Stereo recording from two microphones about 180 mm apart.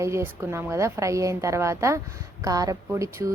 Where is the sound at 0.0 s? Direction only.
15° right (ahead or behind).